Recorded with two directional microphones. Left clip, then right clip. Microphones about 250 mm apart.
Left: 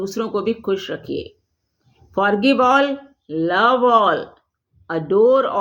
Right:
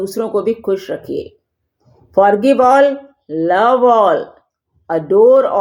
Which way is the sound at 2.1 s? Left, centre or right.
Centre.